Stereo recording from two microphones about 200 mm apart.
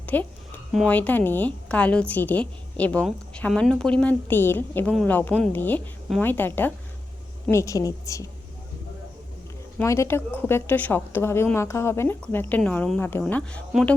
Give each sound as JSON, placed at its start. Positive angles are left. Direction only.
{"t": 0.0, "sound": "a sound", "side_deg": 10}
{"t": 0.7, "sound": "a woman's voice", "side_deg": 5}
{"t": 9.7, "sound": "a woman's voice", "side_deg": 15}